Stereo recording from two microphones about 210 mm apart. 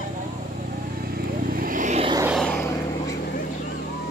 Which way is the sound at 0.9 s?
45° right (ahead or behind).